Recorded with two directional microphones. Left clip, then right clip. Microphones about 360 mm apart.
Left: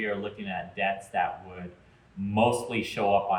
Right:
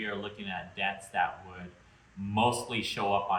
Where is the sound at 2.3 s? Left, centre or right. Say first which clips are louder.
Left 3 dB; centre.